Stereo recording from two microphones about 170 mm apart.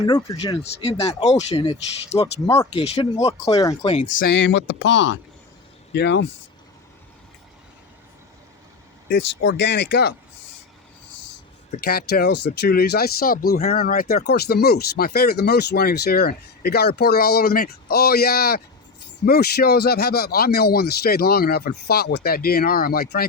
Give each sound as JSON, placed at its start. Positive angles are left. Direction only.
{"t": 0.0, "sound": "speech", "side_deg": 25}
{"t": 0.6, "sound": "speech", "side_deg": 35}
{"t": 2.2, "sound": "speech", "side_deg": 15}
{"t": 2.7, "sound": "speech", "side_deg": 35}
{"t": 4.2, "sound": "speech", "side_deg": 85}
{"t": 9.1, "sound": "speech", "side_deg": 90}
{"t": 11.9, "sound": "speech", "side_deg": 65}